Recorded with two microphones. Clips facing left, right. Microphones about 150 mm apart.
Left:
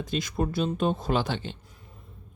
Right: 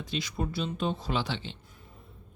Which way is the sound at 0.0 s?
50° left (ahead or behind).